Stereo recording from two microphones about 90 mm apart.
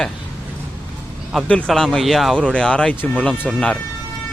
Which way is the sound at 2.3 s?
10° left (ahead or behind).